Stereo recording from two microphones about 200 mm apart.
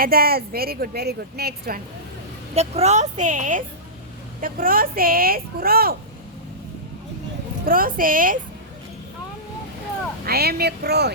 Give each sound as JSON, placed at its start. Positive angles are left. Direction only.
{"t": 0.0, "sound": "a woman's voice", "side_deg": -50}
{"t": 2.6, "sound": "a woman's voice", "side_deg": -35}
{"t": 7.6, "sound": "a woman's voice", "side_deg": -45}
{"t": 10.2, "sound": "a woman's voice", "side_deg": -50}